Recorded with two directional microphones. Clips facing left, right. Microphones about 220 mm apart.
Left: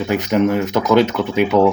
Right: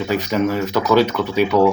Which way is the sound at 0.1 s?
20° left (ahead or behind).